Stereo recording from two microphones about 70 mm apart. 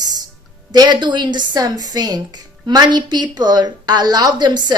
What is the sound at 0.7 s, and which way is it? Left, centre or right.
A woman's voice, right.